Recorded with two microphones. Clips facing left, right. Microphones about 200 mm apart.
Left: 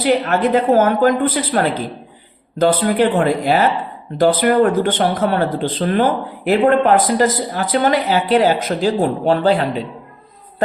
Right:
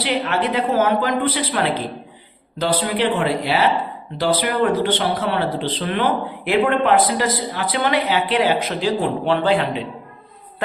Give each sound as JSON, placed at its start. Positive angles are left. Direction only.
{"t": 0.0, "sound": "speech", "side_deg": 45}